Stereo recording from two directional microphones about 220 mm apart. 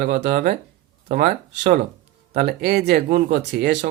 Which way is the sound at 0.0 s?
45° right (ahead or behind).